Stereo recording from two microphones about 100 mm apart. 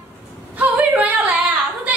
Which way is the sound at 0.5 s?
15° right (ahead or behind).